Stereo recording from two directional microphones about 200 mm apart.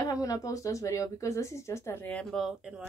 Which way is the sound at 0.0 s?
15° left (ahead or behind).